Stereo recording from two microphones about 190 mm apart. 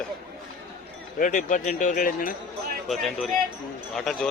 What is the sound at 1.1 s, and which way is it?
A man's voice, 40° left (ahead or behind).